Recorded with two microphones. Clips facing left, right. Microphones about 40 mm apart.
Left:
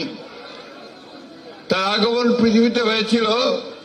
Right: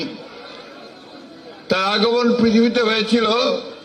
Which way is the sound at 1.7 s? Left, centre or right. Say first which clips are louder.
Right 1 dB; centre.